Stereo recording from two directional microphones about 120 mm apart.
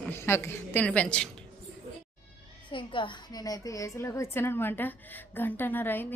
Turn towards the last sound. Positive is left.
turn(degrees=15)  # may be behind; listen again after turning